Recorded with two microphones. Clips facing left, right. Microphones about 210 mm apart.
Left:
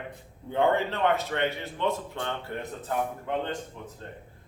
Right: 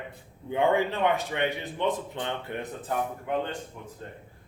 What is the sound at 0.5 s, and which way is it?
A man's voice, 15° right (ahead or behind).